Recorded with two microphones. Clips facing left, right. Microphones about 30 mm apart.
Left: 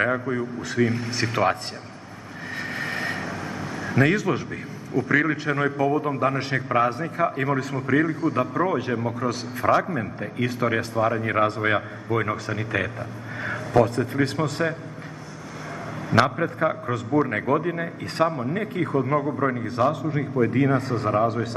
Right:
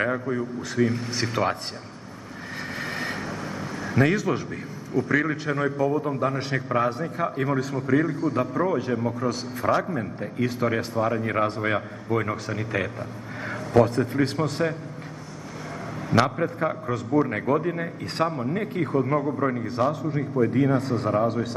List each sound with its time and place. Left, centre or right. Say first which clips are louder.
0.0 s a man's voice: left 2 dB; centre
2.7 s vehicle: left 2 dB; centre
3.8 s a man's voice: left 1 dB; centre
13.4 s a sound: even; centre
13.8 s a man's voice: even; centre
16.1 s a man's voice: left 1 dB; centre
20.7 s a man's voice: even; centre